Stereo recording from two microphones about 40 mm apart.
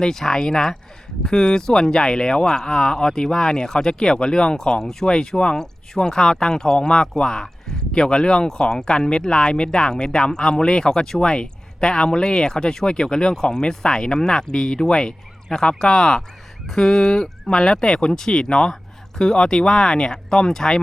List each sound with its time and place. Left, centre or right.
0.0 s speech: centre